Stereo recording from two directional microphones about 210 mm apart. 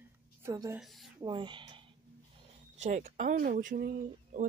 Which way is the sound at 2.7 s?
35° right (ahead or behind).